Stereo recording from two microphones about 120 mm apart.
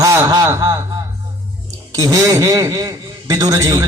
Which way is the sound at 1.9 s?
30° right (ahead or behind).